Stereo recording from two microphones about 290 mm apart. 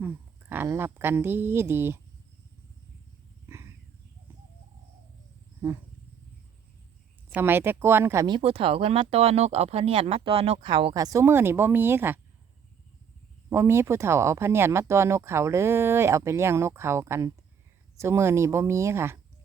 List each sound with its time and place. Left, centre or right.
0.0 s speech: centre
3.5 s wild animals: centre
5.6 s speech: centre
7.3 s speech: centre
13.5 s speech: centre